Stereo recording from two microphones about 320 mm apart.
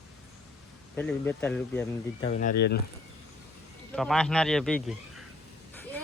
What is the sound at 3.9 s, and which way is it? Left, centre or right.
Speech, centre.